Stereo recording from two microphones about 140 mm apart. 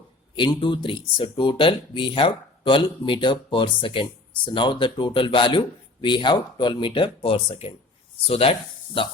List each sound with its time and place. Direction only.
0.3 s speech: 35° left (ahead or behind)